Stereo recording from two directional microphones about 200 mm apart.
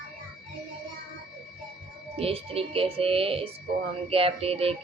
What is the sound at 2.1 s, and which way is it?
Speech, 30° right (ahead or behind).